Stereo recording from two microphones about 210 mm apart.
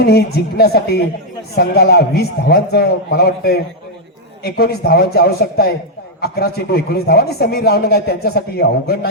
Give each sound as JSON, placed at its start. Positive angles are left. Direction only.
{"t": 0.0, "sound": "a man's voice", "side_deg": 50}